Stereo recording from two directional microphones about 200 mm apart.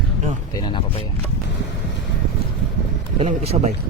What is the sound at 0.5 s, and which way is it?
Speech, 25° left (ahead or behind).